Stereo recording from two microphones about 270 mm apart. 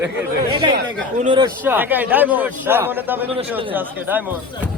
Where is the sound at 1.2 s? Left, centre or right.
Centre.